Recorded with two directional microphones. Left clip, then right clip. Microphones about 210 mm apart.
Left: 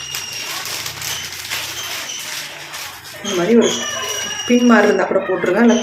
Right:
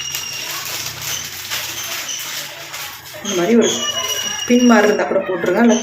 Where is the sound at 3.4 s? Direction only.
5° left (ahead or behind).